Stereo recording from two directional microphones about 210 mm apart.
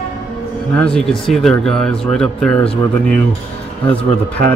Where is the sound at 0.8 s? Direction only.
Centre (ahead or behind).